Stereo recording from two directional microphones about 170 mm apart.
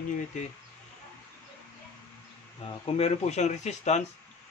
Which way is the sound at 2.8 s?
35° left (ahead or behind).